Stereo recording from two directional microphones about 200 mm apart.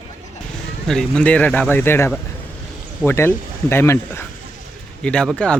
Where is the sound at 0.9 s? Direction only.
5° left (ahead or behind).